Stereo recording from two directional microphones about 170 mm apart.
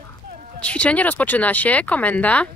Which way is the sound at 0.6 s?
5° left (ahead or behind).